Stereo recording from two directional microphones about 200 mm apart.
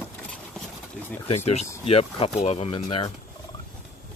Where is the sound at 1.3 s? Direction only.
30° left (ahead or behind).